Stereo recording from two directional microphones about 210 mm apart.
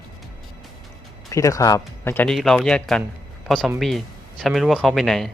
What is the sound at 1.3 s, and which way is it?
Speech, 15° left (ahead or behind).